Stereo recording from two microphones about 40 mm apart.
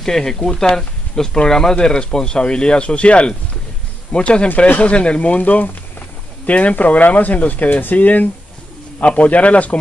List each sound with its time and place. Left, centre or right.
0.0 s speech: centre; by 9.8 s left